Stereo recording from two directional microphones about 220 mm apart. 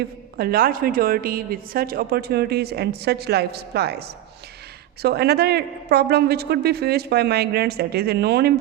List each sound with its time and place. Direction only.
0.0 s a woman's voice: 45° right (ahead or behind)
5.0 s a woman's voice: 45° right (ahead or behind)